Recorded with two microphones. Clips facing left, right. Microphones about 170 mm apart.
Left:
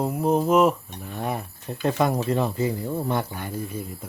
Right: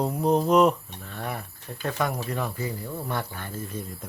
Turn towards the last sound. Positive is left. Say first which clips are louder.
# left 3 dB
turn(degrees=10)  # may be behind; listen again after turning